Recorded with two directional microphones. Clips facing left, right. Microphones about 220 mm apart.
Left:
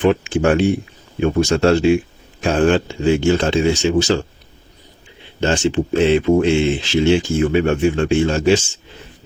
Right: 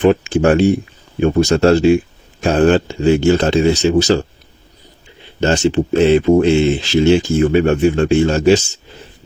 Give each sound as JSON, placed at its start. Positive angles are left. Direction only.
{"t": 0.0, "sound": "speech", "side_deg": -40}
{"t": 5.4, "sound": "speech", "side_deg": -40}